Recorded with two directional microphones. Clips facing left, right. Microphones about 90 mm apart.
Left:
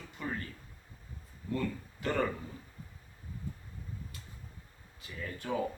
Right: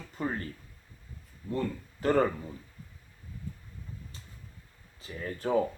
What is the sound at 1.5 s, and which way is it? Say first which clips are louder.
Speech: right 2 dB; 35° right (ahead or behind).